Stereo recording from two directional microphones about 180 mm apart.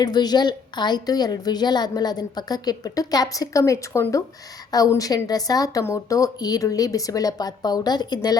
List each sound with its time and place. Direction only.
0.0 s a woman's voice: 20° left (ahead or behind)